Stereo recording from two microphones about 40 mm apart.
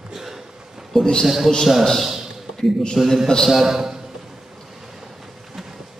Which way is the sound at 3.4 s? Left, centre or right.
Centre.